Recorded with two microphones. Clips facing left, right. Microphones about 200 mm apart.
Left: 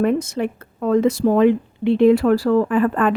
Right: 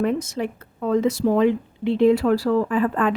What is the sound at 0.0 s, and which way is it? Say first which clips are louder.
A woman's voice: left 4 dB; 55° left (ahead or behind).